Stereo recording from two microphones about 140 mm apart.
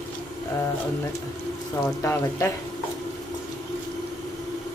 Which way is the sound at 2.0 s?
20° left (ahead or behind).